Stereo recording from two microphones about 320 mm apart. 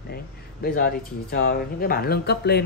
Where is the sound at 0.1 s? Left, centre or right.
Left.